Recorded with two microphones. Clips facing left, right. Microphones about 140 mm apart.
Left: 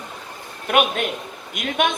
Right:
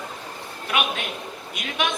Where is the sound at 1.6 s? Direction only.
50° left (ahead or behind).